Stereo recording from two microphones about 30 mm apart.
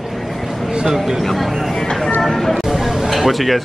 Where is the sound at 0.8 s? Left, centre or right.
Centre.